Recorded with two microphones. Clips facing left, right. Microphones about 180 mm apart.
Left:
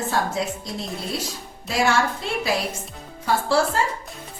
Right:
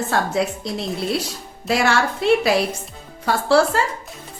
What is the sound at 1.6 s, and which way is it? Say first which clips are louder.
A woman's voice: right 2 dB; 70° right (ahead or behind).